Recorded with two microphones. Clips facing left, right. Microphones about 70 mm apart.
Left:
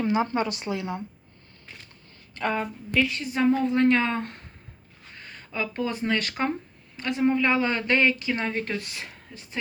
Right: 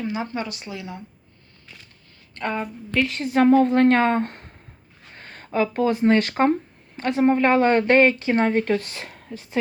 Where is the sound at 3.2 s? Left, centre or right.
Right.